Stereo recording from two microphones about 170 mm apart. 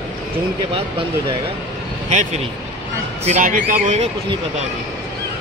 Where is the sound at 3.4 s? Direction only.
50° right (ahead or behind).